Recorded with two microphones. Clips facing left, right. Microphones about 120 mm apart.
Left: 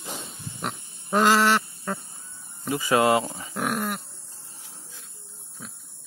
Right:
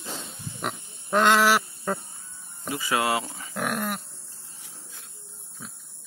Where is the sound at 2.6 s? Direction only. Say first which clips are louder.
Left 5 dB; 40° left (ahead or behind).